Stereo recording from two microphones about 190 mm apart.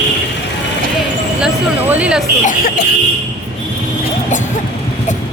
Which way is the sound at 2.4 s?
45° left (ahead or behind).